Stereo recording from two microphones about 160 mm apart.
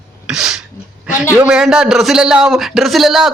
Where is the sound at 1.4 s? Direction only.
5° right (ahead or behind).